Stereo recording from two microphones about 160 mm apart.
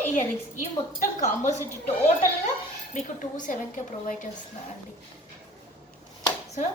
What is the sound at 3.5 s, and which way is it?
Speech, 55° left (ahead or behind).